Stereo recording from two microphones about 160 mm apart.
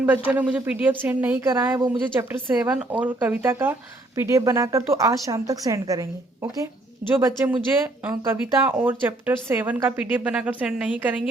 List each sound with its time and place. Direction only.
0.3 s speech: 10° right (ahead or behind)